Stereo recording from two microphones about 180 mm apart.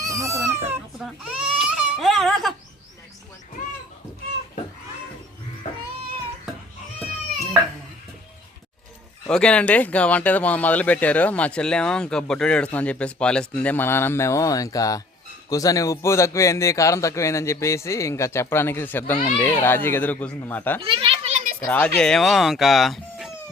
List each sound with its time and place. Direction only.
0.0 s cat: 15° right (ahead or behind)
0.9 s baby cry: 5° right (ahead or behind)
9.3 s speech: 5° left (ahead or behind)
20.8 s a sound: 30° right (ahead or behind)
21.7 s speech: 5° left (ahead or behind)